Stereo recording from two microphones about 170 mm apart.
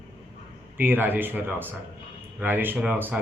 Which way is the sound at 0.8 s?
10° right (ahead or behind).